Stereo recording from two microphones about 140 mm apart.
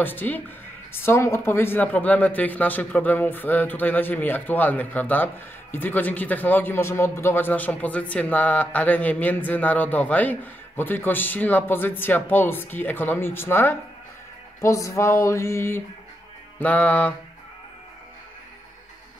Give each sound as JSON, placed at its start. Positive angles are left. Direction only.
{"t": 0.0, "sound": "speech", "side_deg": 15}
{"t": 14.6, "sound": "a sound", "side_deg": 20}
{"t": 16.5, "sound": "speech", "side_deg": 10}